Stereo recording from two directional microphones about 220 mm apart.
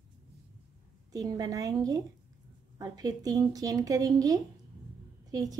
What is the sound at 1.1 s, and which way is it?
A woman's voice, 15° right (ahead or behind).